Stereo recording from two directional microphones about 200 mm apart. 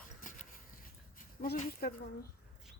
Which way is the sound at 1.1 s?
45° left (ahead or behind).